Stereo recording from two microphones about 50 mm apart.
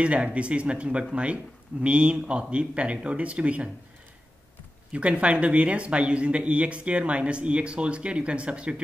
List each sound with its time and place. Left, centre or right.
0.0 s speech: right
4.9 s speech: right